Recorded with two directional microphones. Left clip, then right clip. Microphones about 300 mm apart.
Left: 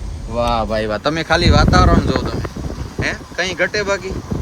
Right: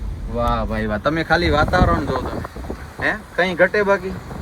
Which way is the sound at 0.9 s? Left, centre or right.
Centre.